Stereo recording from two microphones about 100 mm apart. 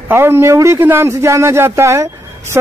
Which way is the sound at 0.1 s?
25° right (ahead or behind).